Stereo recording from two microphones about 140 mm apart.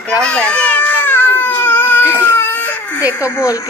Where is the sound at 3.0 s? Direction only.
20° left (ahead or behind).